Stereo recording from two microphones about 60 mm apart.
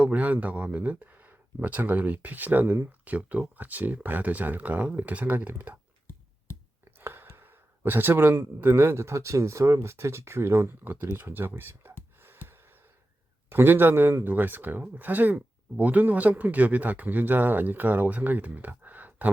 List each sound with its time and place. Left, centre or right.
0.0 s speech: right
7.0 s speech: right
12.2 s a sound: right
13.5 s speech: right